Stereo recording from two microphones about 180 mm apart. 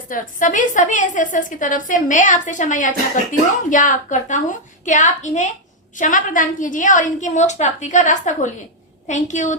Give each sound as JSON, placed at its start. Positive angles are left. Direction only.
{"t": 0.1, "sound": "a woman's voice", "side_deg": 45}